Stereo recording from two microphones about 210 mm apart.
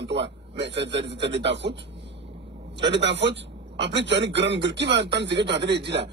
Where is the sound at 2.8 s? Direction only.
55° right (ahead or behind).